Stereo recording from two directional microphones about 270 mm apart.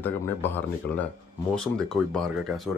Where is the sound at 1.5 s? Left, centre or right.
Centre.